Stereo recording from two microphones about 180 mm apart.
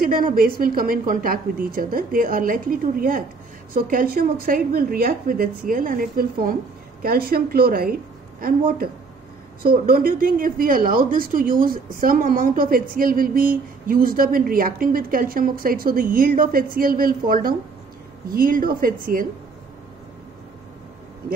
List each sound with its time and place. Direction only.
0.0 s a woman's voice: 50° right (ahead or behind)